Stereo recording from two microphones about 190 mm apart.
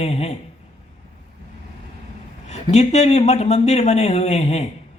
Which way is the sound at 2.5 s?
35° left (ahead or behind).